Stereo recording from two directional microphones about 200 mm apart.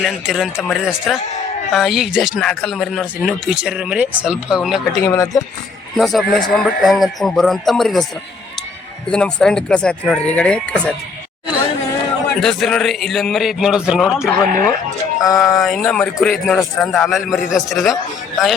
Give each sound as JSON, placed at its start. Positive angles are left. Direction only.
{"t": 0.0, "sound": "speech", "side_deg": 0}
{"t": 5.0, "sound": "speech", "side_deg": 15}
{"t": 6.0, "sound": "speech", "side_deg": 0}
{"t": 9.0, "sound": "speech", "side_deg": 5}
{"t": 12.4, "sound": "speech", "side_deg": 0}
{"t": 14.2, "sound": "speech", "side_deg": 15}
{"t": 15.4, "sound": "speech", "side_deg": 0}